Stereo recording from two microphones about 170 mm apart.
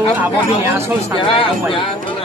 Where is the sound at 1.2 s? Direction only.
30° left (ahead or behind).